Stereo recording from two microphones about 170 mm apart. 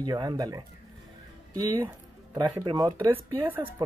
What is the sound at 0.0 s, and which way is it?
Speech, 25° right (ahead or behind).